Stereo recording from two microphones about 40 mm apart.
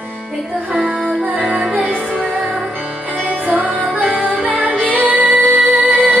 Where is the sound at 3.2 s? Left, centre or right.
Right.